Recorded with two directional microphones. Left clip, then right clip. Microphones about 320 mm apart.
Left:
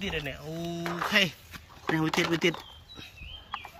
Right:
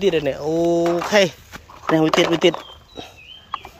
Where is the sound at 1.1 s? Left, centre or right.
Centre.